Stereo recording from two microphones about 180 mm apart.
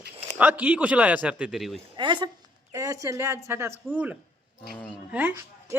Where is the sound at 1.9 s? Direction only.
25° right (ahead or behind); by 4.2 s 10° right (ahead or behind).